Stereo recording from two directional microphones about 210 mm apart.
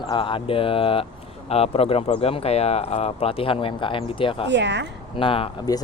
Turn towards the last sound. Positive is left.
turn(degrees=20)  # may be behind; listen again after turning